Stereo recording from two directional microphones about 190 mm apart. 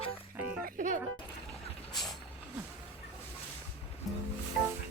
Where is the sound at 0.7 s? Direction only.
40° right (ahead or behind).